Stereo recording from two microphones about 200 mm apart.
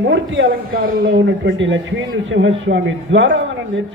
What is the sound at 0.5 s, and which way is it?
A man's voice, 45° right (ahead or behind).